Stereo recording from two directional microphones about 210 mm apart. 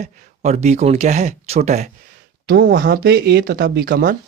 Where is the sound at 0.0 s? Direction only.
30° right (ahead or behind).